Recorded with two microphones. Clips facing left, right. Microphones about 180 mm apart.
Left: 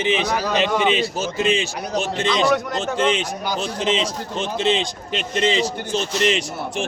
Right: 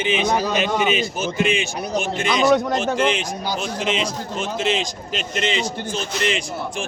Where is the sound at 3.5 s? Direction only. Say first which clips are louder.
Left 2 dB; 35° left (ahead or behind).